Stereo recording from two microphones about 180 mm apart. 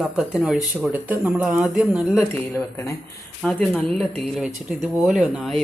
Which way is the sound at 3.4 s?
Centre (ahead or behind).